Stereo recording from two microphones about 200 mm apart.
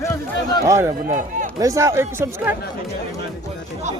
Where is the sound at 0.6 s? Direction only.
15° right (ahead or behind).